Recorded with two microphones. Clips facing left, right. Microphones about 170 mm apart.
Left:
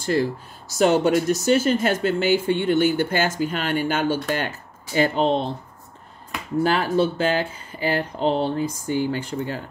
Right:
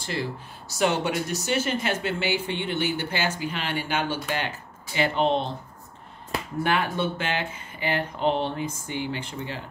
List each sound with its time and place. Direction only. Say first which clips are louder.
0.0 s speech: left 9 dB; 45° left (ahead or behind)
6.6 s speech: left 6 dB; 35° left (ahead or behind)